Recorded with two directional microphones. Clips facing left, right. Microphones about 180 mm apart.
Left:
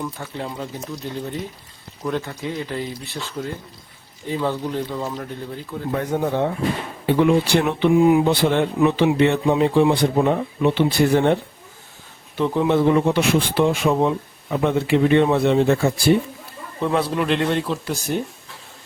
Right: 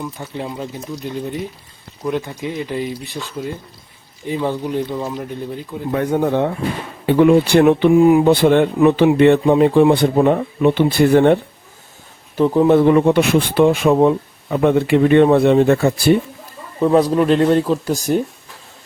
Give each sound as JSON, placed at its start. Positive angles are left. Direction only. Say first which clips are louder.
{"t": 0.2, "sound": "speech", "louder": "right 3 dB", "side_deg": -15}
{"t": 6.0, "sound": "speech", "louder": "right 6 dB", "side_deg": -70}
{"t": 7.2, "sound": "speech", "louder": "right 6 dB", "side_deg": -60}
{"t": 12.4, "sound": "speech", "louder": "right 6 dB", "side_deg": -45}
{"t": 16.8, "sound": "speech", "louder": "right 7 dB", "side_deg": -40}